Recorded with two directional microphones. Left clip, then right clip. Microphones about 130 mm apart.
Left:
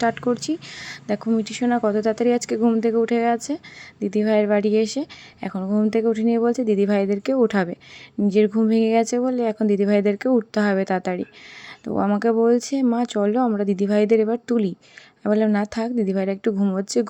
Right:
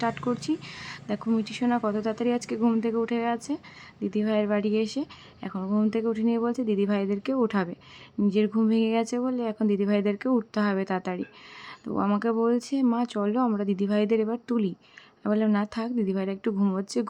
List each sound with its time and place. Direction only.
0.0 s a woman's voice: 35° left (ahead or behind)